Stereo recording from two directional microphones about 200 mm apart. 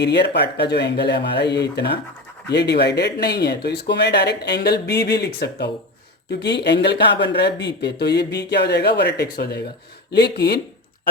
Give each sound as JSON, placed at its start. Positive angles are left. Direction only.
{"t": 0.0, "sound": "speech", "side_deg": 60}